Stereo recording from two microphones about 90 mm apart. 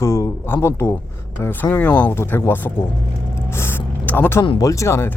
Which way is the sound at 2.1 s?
30° left (ahead or behind).